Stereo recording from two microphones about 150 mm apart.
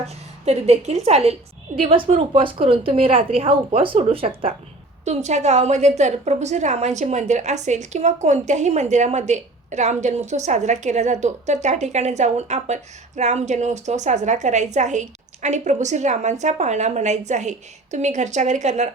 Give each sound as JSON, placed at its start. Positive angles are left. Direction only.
{"t": 0.0, "sound": "a woman's voice", "side_deg": -45}
{"t": 5.0, "sound": "a woman's voice", "side_deg": -50}